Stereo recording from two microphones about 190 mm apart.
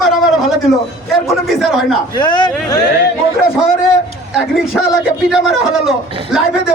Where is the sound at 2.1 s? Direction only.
25° left (ahead or behind).